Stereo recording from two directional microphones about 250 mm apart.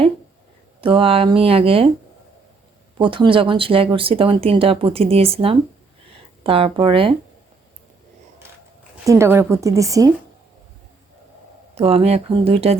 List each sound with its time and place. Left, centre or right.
0.8 s speech: right
3.0 s speech: centre
9.0 s a woman's voice: centre
11.7 s speech: right